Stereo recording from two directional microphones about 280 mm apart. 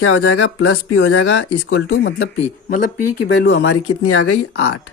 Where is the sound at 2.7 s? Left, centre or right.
Left.